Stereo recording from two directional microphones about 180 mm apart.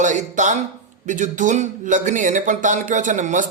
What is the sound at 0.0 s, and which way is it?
A man's voice, 45° right (ahead or behind).